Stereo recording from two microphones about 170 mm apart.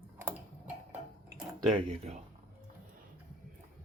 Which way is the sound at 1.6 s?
35° right (ahead or behind).